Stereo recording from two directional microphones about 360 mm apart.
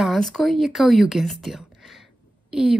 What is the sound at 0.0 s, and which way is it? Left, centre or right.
A woman's voice, centre.